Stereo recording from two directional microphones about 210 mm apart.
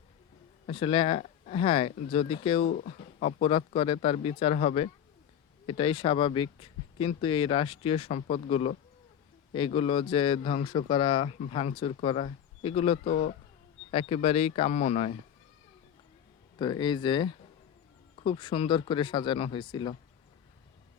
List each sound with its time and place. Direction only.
0.7 s speech: 25° left (ahead or behind)
2.7 s speech: 35° left (ahead or behind)
13.1 s speech: 40° left (ahead or behind)
13.9 s speech: 25° left (ahead or behind)
16.6 s speech: 20° left (ahead or behind)